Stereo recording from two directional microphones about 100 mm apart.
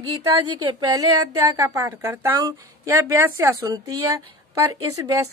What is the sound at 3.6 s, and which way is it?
A woman's voice, 35° right (ahead or behind).